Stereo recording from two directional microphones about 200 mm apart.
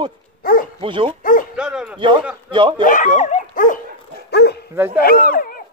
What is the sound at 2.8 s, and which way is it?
Speech, 40° left (ahead or behind).